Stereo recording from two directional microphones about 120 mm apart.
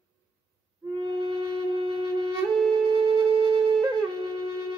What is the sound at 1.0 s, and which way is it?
Wind instrument, 40° right (ahead or behind).